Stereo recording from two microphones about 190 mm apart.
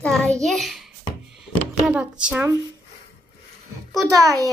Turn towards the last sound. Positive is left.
turn(degrees=-20)  # may be behind; listen again after turning